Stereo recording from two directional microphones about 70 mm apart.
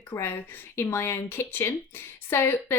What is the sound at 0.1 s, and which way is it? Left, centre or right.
Speech, left.